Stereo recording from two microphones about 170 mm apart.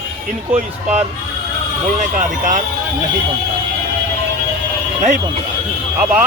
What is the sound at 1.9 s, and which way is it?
Speech, 50° right (ahead or behind).